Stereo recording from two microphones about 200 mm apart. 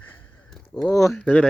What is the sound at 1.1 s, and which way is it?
Speech, 5° left (ahead or behind).